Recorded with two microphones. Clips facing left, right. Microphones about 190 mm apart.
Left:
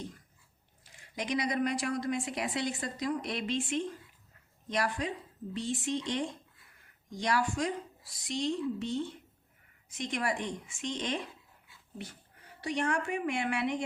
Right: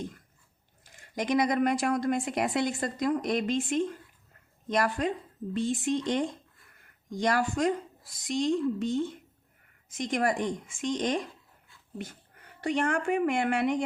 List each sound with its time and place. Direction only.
0.9 s a woman's voice: 50° right (ahead or behind)